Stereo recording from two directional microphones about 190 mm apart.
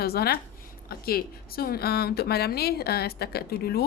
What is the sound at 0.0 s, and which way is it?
A woman's voice, 55° left (ahead or behind).